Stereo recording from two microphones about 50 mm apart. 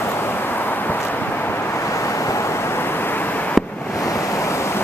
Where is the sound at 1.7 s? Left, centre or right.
Left.